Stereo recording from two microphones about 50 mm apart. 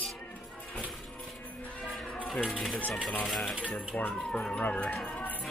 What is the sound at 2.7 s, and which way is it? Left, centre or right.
Speech, left.